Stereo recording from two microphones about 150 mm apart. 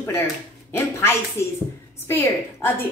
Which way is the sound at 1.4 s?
20° left (ahead or behind).